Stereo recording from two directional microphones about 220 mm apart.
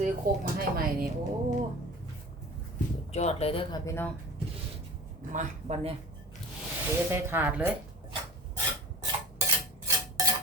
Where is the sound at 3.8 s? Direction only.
10° left (ahead or behind).